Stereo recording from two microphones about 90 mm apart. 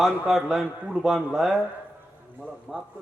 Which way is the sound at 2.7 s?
15° right (ahead or behind).